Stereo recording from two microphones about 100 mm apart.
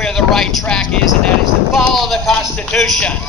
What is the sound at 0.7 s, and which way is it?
Speech, 5° left (ahead or behind).